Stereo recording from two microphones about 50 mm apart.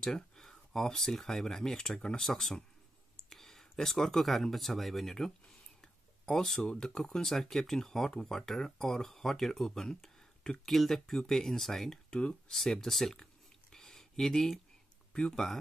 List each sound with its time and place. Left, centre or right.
0.0 s speech: centre
5.8 s a sound: centre
6.6 s speech: centre
12.1 s speech: left
12.4 s a sound: centre
15.1 s speech: centre